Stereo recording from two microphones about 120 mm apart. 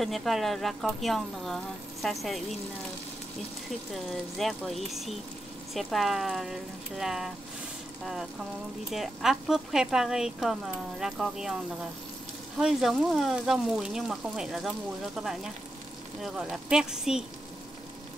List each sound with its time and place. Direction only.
0.0 s speech: centre (ahead or behind)
3.9 s speech: centre (ahead or behind)
12.5 s speech: 5° right (ahead or behind)